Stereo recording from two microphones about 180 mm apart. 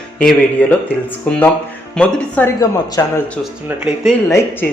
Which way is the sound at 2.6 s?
20° left (ahead or behind).